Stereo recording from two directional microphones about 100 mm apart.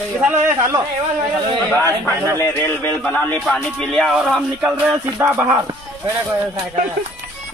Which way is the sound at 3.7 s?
5° left (ahead or behind).